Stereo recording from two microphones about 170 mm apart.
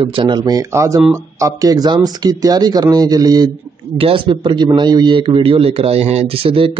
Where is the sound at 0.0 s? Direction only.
30° right (ahead or behind).